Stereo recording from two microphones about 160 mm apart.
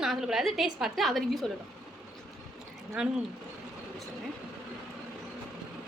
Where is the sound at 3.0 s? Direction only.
5° right (ahead or behind).